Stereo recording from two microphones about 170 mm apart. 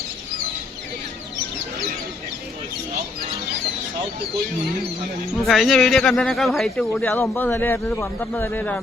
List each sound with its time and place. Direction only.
5.5 s a man's voice: centre (ahead or behind)